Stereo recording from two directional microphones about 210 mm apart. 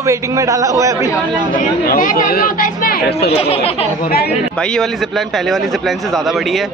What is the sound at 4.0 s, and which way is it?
Speech, 45° left (ahead or behind).